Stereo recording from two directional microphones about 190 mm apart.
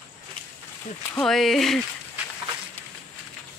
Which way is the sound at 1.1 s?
Centre (ahead or behind).